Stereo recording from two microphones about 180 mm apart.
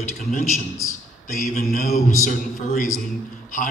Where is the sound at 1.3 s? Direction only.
55° left (ahead or behind).